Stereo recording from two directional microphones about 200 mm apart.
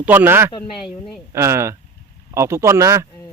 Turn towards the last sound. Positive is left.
turn(degrees=-15)  # may be behind; listen again after turning